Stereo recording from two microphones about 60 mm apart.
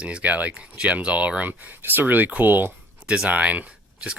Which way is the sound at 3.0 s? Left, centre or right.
Centre.